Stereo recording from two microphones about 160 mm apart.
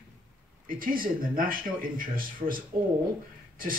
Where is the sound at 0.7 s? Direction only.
60° right (ahead or behind).